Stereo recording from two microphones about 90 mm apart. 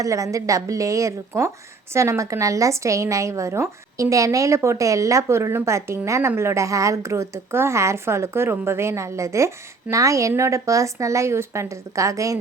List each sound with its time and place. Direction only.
0.0 s a woman's voice: 35° right (ahead or behind)